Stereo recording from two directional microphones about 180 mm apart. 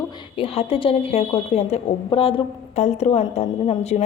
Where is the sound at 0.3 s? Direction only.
30° left (ahead or behind).